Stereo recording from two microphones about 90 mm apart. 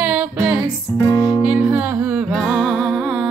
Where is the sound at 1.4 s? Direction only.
15° right (ahead or behind).